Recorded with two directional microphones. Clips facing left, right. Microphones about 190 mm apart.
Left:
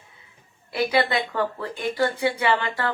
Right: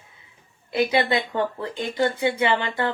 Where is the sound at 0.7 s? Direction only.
20° right (ahead or behind).